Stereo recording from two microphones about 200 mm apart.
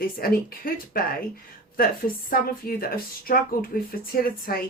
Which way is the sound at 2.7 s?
45° left (ahead or behind).